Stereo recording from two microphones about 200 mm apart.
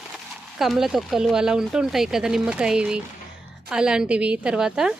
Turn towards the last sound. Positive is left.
turn(degrees=-5)  # may be behind; listen again after turning